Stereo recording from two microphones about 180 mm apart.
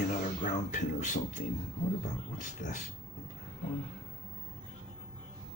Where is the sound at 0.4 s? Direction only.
45° left (ahead or behind).